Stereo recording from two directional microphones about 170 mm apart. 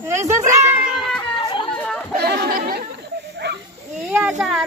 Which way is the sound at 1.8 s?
5° left (ahead or behind).